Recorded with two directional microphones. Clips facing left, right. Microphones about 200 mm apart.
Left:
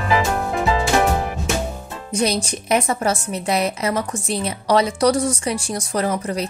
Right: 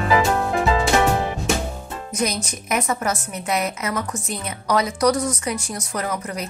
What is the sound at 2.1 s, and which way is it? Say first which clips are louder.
A woman's voice: left 4 dB; 30° left (ahead or behind).